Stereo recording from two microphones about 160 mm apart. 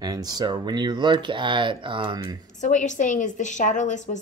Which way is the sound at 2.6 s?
50° left (ahead or behind).